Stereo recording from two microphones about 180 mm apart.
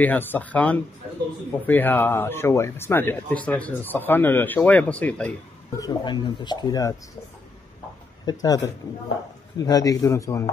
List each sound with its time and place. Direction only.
0.0 s speech: 10° left (ahead or behind)
5.8 s speech: 25° left (ahead or behind)
8.3 s speech: 20° left (ahead or behind)